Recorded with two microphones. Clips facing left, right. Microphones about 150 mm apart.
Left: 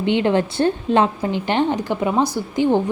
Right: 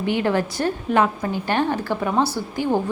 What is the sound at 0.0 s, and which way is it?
A woman's voice, 20° left (ahead or behind).